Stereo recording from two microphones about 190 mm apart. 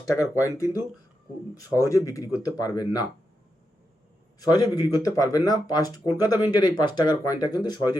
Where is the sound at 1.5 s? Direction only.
20° left (ahead or behind).